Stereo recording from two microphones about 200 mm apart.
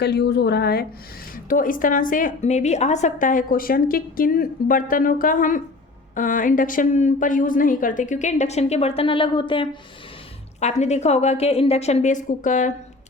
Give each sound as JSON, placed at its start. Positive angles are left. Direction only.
{"t": 0.0, "sound": "a woman's voice", "side_deg": 55}